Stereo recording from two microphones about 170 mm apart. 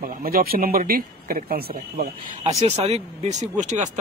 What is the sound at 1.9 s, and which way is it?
Speech, 45° right (ahead or behind).